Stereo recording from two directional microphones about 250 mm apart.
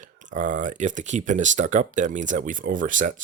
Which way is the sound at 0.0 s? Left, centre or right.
Right.